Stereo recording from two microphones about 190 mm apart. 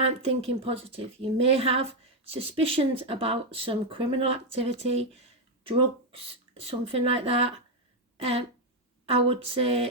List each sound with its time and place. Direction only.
0.0 s a woman's voice: 30° right (ahead or behind)